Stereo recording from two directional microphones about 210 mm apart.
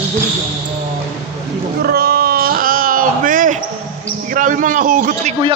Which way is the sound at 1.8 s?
45° right (ahead or behind).